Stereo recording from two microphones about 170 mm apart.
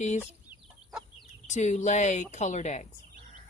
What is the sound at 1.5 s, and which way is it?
Speech, 45° left (ahead or behind).